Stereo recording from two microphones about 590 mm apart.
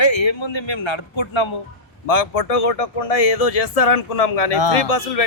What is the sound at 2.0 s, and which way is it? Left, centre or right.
Speech, left.